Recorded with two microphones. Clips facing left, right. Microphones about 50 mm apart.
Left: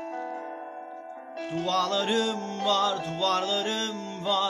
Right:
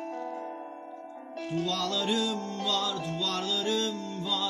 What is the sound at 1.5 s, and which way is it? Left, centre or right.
Music, left.